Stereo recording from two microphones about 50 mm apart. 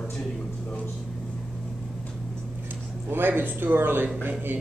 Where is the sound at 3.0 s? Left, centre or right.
Right.